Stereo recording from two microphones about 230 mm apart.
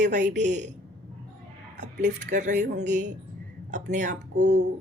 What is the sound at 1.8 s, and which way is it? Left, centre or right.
A woman's voice, right.